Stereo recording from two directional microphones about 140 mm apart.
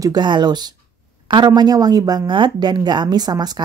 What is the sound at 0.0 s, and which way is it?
Speech, 30° right (ahead or behind).